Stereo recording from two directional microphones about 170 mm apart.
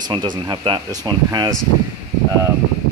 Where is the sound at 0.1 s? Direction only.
25° right (ahead or behind).